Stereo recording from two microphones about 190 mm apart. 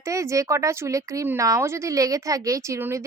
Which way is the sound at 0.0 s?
15° right (ahead or behind).